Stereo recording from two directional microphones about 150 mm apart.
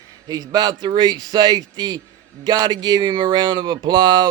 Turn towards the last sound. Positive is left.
turn(degrees=-30)  # may be behind; listen again after turning